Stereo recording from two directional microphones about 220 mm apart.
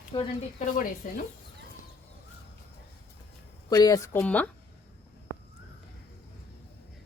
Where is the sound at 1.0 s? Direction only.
40° left (ahead or behind).